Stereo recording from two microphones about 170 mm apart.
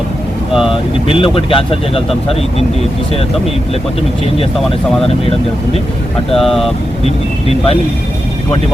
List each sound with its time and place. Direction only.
0.5 s vehicle: centre (ahead or behind)
1.0 s speech: 30° left (ahead or behind)
6.3 s speech: centre (ahead or behind)
7.0 s speech: 35° left (ahead or behind)